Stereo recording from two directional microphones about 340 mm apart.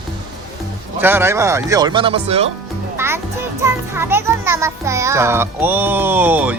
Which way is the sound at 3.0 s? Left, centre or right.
Centre.